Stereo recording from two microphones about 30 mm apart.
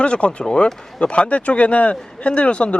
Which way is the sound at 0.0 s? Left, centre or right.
Left.